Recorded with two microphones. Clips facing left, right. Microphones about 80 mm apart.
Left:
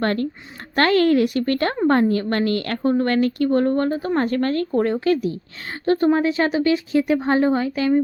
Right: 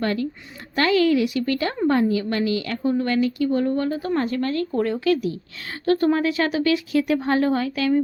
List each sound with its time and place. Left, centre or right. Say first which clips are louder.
0.0 s a woman's voice: left 2 dB; left
4.3 s a woman's voice: left 3 dB; left
4.7 s a woman's voice: left 1 dB; left